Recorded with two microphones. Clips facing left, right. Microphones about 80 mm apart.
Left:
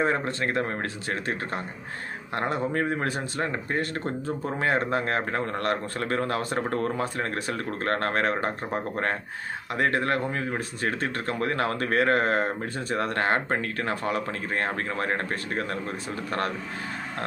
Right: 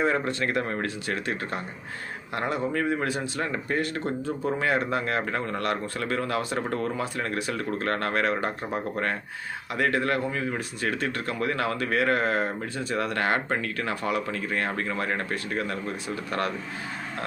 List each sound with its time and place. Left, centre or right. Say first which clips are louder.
0.0 s speech: even; left